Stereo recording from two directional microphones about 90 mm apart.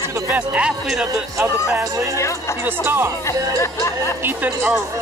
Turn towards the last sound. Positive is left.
turn(degrees=-20)  # may be behind; listen again after turning